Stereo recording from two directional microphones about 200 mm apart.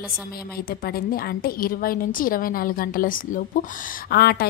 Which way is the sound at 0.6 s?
50° left (ahead or behind).